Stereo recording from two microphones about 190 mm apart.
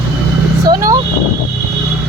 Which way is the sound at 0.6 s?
20° right (ahead or behind).